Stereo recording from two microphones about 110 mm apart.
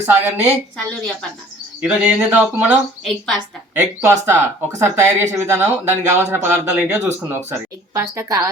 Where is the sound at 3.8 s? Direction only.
25° right (ahead or behind).